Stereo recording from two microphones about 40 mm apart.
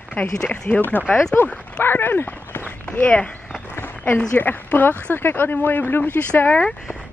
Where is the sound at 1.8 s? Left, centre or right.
Left.